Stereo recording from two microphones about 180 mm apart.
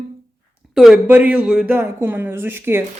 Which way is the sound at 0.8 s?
Centre (ahead or behind).